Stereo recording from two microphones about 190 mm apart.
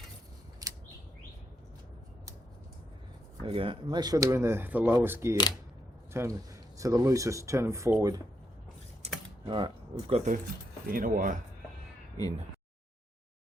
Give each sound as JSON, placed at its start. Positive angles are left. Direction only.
{"t": 0.6, "sound": "a sound", "side_deg": -20}
{"t": 3.4, "sound": "speech", "side_deg": -30}
{"t": 9.0, "sound": "typing", "side_deg": -35}
{"t": 9.5, "sound": "speech", "side_deg": -25}
{"t": 10.8, "sound": "speech", "side_deg": -50}